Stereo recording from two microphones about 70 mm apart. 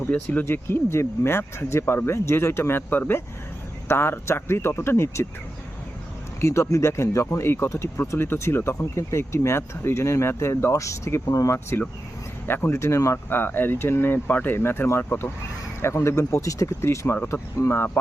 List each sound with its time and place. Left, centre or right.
0.1 s speech: left
0.4 s speech: left
6.4 s speech: left
12.5 s speech: left
12.7 s speech: left
13.4 s speech: left